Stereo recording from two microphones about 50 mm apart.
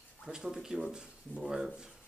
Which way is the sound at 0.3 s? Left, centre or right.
Centre.